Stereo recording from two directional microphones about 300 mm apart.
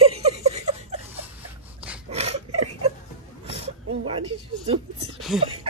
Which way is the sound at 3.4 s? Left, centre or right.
Centre.